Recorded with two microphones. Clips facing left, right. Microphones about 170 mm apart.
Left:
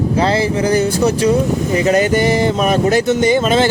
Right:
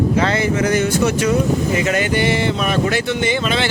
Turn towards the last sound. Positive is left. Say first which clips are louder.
# left 6 dB
turn(degrees=45)  # may be behind; listen again after turning